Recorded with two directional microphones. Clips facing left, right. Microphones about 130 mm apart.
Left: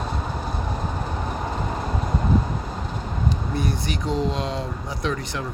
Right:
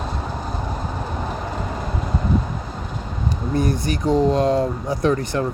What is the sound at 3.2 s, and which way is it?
Speech, 45° right (ahead or behind).